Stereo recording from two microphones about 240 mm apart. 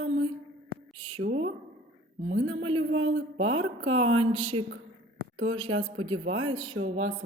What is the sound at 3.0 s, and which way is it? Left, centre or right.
Mantra, right.